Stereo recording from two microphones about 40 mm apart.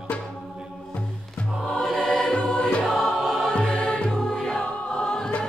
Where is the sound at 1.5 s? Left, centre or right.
Centre.